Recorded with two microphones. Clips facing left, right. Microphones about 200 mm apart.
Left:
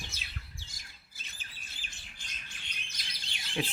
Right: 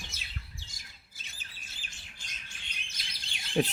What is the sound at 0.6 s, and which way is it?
Bird, 55° left (ahead or behind).